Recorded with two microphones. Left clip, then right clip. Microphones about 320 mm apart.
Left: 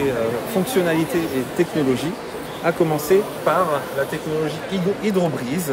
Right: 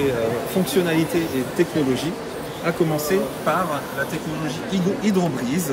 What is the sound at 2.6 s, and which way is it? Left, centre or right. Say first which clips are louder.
Speech: left 2 dB; centre.